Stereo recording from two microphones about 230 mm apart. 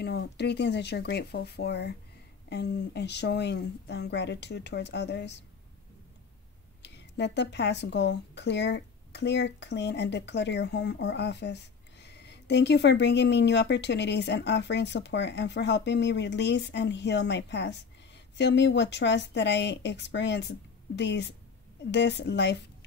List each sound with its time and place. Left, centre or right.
0.0 s speech: left
6.8 s speech: left